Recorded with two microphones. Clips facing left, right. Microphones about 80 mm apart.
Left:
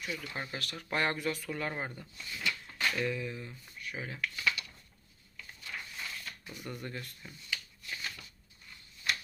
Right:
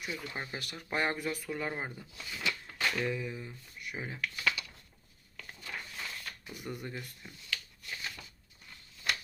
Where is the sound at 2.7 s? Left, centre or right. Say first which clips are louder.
Even; centre.